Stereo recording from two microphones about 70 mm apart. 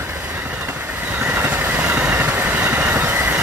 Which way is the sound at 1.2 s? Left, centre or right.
Right.